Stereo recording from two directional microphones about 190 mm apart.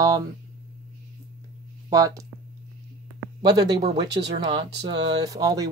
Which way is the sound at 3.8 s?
30° right (ahead or behind).